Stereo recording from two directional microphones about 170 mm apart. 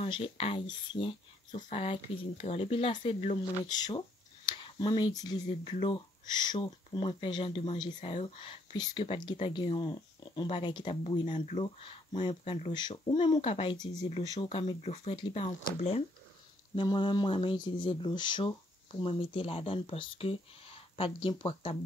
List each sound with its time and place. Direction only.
0.0 s speech: 35° left (ahead or behind)
3.6 s speech: 25° left (ahead or behind)
5.5 s speech: 35° left (ahead or behind)
5.9 s speech: 25° left (ahead or behind)